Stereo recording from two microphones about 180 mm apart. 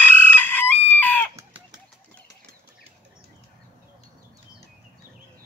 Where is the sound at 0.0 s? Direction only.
10° left (ahead or behind).